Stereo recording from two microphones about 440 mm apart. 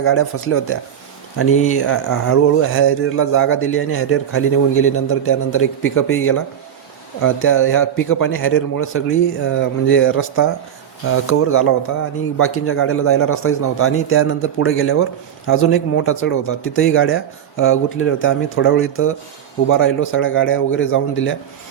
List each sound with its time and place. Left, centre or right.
0.0 s speech: left